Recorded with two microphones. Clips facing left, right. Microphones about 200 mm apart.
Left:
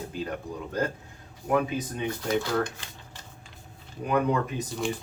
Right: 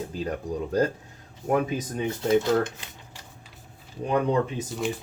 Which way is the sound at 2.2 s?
20° right (ahead or behind).